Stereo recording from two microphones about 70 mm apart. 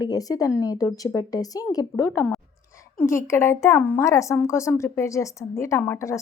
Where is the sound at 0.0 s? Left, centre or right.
Left.